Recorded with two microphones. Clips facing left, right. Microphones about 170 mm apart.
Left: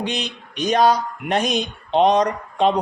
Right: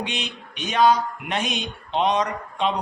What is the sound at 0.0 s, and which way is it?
Speech, 35° left (ahead or behind).